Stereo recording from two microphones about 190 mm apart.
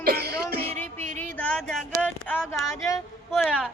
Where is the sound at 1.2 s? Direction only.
5° left (ahead or behind).